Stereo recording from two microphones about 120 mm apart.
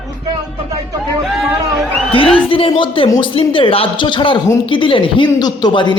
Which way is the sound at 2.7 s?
45° left (ahead or behind).